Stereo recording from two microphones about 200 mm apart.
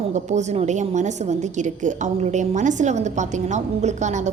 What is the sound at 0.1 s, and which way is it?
A woman's voice, 35° right (ahead or behind).